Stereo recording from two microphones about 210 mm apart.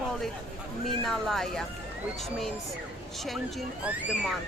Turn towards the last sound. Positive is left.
turn(degrees=-5)  # may be behind; listen again after turning